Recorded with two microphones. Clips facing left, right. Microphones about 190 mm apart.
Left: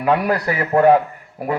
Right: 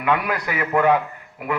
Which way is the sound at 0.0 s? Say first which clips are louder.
Left 5 dB; 35° left (ahead or behind).